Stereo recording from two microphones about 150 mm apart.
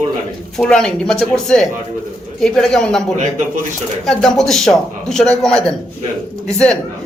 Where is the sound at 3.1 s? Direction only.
55° right (ahead or behind).